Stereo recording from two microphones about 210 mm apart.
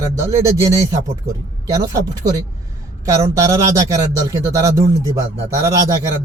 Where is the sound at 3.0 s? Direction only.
15° right (ahead or behind).